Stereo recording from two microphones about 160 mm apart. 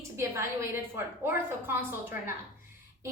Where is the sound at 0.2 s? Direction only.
15° right (ahead or behind).